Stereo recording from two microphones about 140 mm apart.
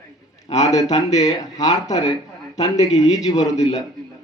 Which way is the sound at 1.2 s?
25° left (ahead or behind).